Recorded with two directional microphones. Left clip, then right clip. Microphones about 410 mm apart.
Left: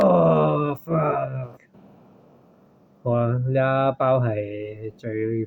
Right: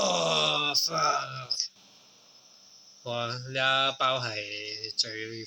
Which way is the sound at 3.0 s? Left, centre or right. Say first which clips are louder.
Left 9 dB; left.